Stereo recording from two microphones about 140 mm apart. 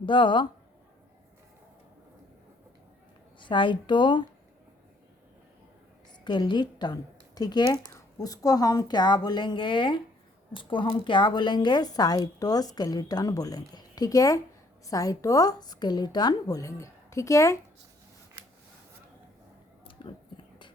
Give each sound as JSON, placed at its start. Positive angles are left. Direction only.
{"t": 0.0, "sound": "a woman's voice", "side_deg": 35}
{"t": 3.4, "sound": "a woman's voice", "side_deg": 35}
{"t": 6.2, "sound": "a woman's voice", "side_deg": 30}
{"t": 19.9, "sound": "whispering", "side_deg": 35}